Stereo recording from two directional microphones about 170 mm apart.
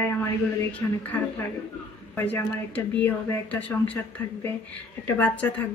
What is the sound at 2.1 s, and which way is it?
Speech, 10° left (ahead or behind).